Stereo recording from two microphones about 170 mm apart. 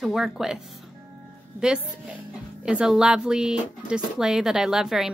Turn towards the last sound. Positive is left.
turn(degrees=0)  # may be behind; listen again after turning